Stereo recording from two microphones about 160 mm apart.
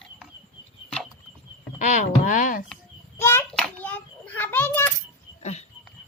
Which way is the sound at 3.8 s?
10° left (ahead or behind).